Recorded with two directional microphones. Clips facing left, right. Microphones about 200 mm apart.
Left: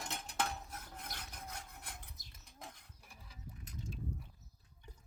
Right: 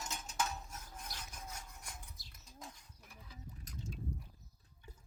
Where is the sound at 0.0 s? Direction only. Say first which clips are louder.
Left 1 dB; 60° left (ahead or behind).